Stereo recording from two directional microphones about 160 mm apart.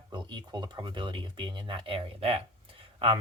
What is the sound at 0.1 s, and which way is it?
Speech, 30° right (ahead or behind).